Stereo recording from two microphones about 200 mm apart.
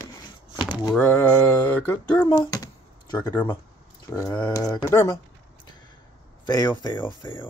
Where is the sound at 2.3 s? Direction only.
20° left (ahead or behind).